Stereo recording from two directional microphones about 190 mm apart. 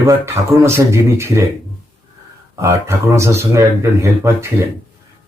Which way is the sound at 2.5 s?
15° right (ahead or behind).